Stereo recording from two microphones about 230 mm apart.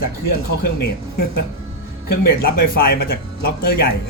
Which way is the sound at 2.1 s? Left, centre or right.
Left.